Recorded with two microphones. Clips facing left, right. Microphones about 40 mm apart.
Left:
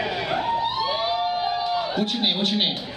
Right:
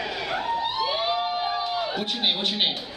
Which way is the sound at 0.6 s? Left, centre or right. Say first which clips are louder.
Left 2 dB; centre.